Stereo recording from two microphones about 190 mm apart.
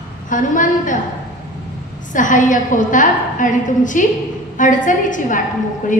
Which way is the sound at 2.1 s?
45° left (ahead or behind).